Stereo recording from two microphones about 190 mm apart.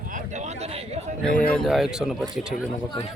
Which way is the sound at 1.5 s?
Centre (ahead or behind).